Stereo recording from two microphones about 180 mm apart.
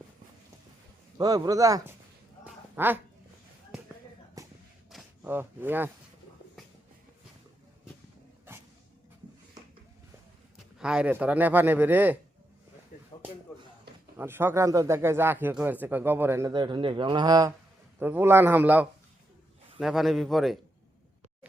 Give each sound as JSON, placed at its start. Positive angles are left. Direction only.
{"t": 1.2, "sound": "speech", "side_deg": -20}
{"t": 2.4, "sound": "quack", "side_deg": -10}
{"t": 4.4, "sound": "a sound", "side_deg": -20}
{"t": 4.9, "sound": "a sound", "side_deg": 0}
{"t": 5.3, "sound": "speech", "side_deg": -10}
{"t": 10.8, "sound": "speech", "side_deg": -5}
{"t": 14.2, "sound": "speech", "side_deg": -10}
{"t": 16.5, "sound": "speech", "side_deg": -25}
{"t": 18.0, "sound": "speech", "side_deg": -10}